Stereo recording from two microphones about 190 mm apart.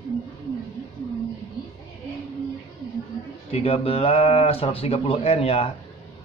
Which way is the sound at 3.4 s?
30° left (ahead or behind).